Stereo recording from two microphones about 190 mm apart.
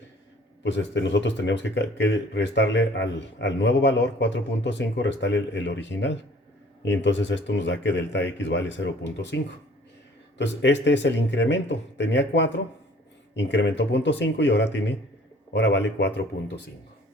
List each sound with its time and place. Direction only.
0.6 s speech: 70° left (ahead or behind)